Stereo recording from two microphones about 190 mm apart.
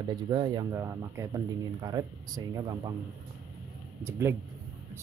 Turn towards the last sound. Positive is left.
turn(degrees=-15)  # may be behind; listen again after turning